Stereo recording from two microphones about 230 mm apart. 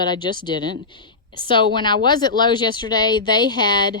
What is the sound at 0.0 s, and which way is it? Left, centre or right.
Speech, centre.